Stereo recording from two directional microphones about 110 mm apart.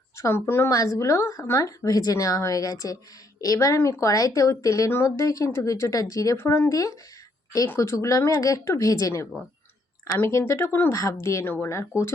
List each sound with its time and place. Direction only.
0.2 s a woman's voice: 25° left (ahead or behind)